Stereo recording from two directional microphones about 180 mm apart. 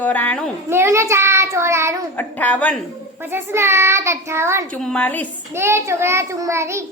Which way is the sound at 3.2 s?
15° right (ahead or behind).